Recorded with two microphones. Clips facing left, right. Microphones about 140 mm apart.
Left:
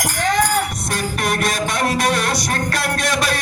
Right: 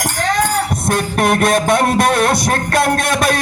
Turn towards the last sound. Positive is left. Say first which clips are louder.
# right 5 dB
turn(degrees=-50)  # may be behind; listen again after turning